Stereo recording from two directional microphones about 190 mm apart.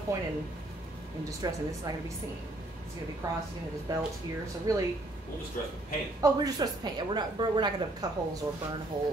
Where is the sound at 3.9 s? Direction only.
20° right (ahead or behind).